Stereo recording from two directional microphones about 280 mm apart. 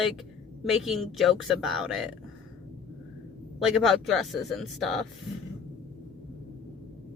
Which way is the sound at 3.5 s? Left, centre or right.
Centre.